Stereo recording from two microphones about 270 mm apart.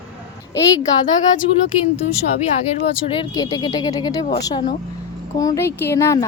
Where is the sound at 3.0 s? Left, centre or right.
Centre.